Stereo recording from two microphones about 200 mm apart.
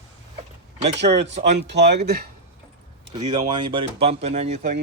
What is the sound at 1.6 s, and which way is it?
Speech, 55° right (ahead or behind).